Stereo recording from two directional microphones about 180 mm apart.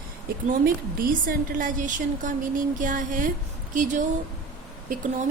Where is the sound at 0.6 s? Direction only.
50° right (ahead or behind).